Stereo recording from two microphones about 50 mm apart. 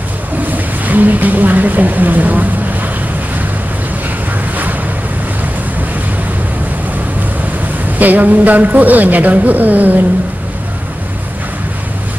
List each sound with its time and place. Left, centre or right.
0.5 s speech: right
8.0 s a woman's voice: right